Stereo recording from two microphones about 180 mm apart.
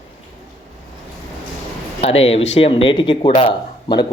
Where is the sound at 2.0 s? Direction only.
35° left (ahead or behind).